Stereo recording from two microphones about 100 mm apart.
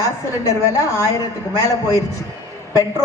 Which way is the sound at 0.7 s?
30° left (ahead or behind).